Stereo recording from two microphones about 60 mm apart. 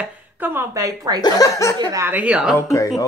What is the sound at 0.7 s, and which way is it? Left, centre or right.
Speech, right.